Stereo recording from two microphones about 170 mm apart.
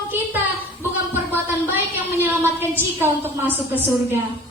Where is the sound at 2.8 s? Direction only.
10° right (ahead or behind).